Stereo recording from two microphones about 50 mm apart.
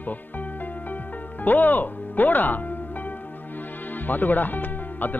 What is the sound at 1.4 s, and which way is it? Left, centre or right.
Speech, left.